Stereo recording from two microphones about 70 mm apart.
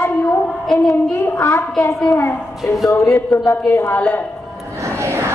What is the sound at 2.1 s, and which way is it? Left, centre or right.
Speech, left.